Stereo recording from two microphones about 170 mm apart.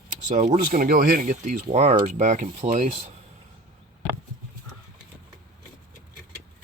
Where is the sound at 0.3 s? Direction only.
50° right (ahead or behind).